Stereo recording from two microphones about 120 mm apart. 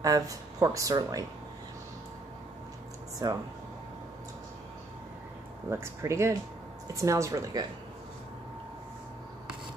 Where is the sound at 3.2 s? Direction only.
30° right (ahead or behind).